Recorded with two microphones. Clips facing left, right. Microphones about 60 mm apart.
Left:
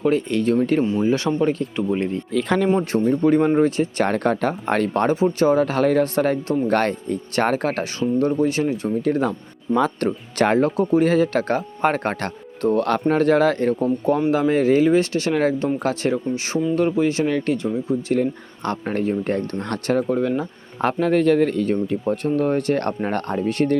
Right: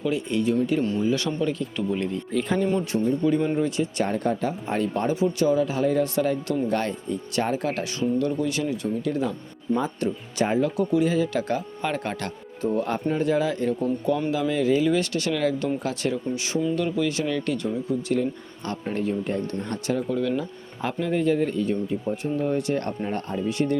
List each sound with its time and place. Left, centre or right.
0.0 s speech: left
1.0 s speech: left
2.4 s speech: left
3.0 s speech: left
4.0 s speech: left
5.1 s speech: left
6.1 s speech: left
10.0 s speech: left
10.7 s speech: left
13.7 s speech: left
18.1 s speech: left
20.1 s speech: left
20.8 s speech: left